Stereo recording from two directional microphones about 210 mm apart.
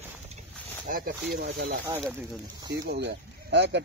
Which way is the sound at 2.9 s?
50° right (ahead or behind).